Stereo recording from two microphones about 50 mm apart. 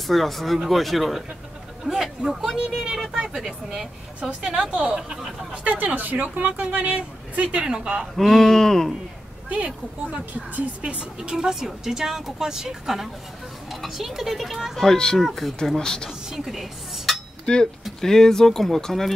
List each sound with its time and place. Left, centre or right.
0.0 s speech: centre
5.5 s speech: right
8.2 s speech: centre
10.1 s speech: right
11.1 s speech: centre
14.8 s speech: centre
15.1 s speech: centre
15.8 s speech: centre
16.3 s dishes: centre
17.5 s speech: centre